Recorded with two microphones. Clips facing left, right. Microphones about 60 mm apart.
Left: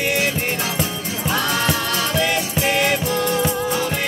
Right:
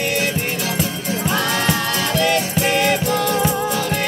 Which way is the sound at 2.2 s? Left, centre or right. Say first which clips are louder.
Right 4 dB; centre.